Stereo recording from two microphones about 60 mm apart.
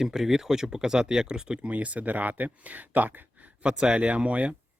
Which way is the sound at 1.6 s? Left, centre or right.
Right.